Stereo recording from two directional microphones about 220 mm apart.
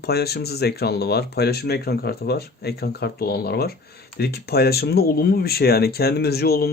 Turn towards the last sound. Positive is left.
turn(degrees=45)  # may be behind; listen again after turning